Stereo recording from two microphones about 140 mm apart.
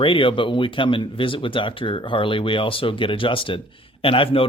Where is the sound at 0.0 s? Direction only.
40° left (ahead or behind).